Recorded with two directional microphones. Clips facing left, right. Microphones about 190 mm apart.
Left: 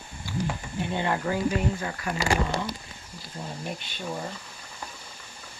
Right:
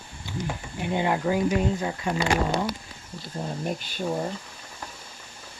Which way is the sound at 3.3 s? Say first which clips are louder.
Right 5 dB; 45° right (ahead or behind).